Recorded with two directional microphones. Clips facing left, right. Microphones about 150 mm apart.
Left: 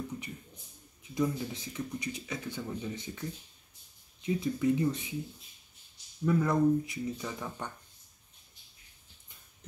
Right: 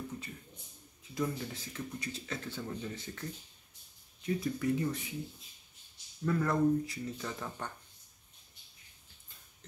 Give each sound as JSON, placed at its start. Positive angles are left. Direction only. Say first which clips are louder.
{"t": 1.1, "sound": "speech", "louder": "left 4 dB", "side_deg": 20}
{"t": 6.2, "sound": "speech", "louder": "left 3 dB", "side_deg": 15}